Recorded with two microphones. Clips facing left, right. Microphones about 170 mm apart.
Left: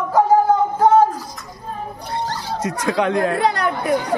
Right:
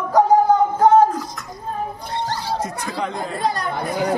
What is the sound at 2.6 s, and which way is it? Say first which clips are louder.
Speech: left 5 dB; 85° left.